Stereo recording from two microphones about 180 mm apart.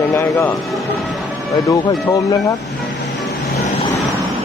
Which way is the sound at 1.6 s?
20° left (ahead or behind).